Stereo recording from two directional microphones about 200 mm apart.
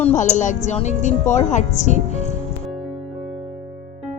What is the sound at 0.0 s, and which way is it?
Speech, 35° left (ahead or behind).